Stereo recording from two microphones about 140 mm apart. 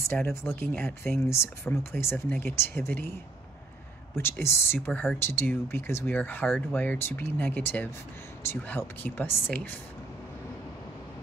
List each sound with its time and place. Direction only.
0.1 s speech: 15° left (ahead or behind)
4.2 s speech: 20° left (ahead or behind)